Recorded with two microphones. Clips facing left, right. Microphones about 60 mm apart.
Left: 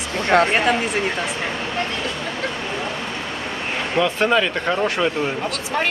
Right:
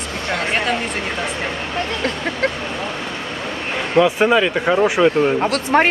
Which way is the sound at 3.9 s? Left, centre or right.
Centre.